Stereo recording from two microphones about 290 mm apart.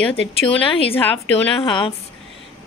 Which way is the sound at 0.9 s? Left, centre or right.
Centre.